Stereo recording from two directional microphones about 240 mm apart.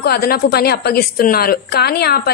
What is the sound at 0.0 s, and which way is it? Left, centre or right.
A woman's voice, left.